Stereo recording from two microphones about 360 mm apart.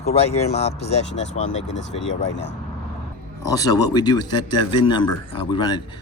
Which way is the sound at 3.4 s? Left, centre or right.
Centre.